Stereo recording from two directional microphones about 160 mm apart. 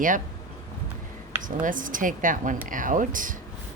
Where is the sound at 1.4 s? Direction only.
55° right (ahead or behind).